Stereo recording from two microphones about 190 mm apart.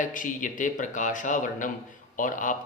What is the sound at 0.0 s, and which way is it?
A man's voice, 45° left (ahead or behind).